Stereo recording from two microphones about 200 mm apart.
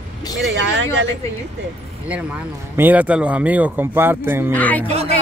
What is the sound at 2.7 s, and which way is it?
Speech, 10° right (ahead or behind).